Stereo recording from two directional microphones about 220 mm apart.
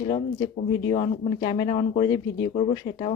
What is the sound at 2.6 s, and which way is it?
Speech, 30° left (ahead or behind).